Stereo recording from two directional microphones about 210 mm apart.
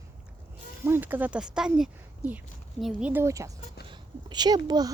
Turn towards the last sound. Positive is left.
turn(degrees=-20)  # may be behind; listen again after turning